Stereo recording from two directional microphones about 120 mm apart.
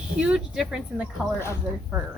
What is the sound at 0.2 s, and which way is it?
Speech, 5° right (ahead or behind).